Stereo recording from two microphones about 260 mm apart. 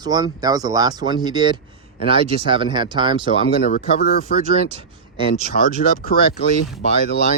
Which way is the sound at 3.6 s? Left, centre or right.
Left.